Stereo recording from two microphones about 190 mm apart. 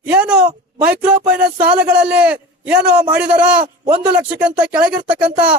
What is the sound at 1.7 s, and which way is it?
A man's voice, 5° right (ahead or behind).